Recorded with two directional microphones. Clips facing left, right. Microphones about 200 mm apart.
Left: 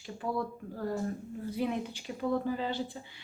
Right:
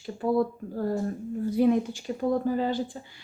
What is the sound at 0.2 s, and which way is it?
A woman's voice, 40° right (ahead or behind).